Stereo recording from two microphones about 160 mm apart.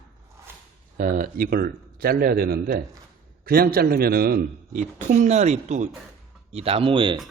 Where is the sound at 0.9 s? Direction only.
60° right (ahead or behind).